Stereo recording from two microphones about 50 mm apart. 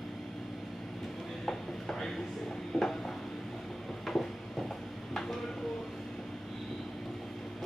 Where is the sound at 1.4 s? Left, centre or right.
Centre.